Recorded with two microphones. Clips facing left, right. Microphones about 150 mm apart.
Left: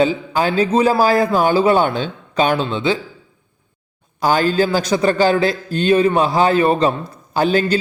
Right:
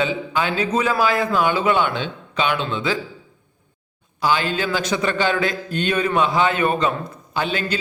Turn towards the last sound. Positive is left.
turn(degrees=40)  # may be behind; listen again after turning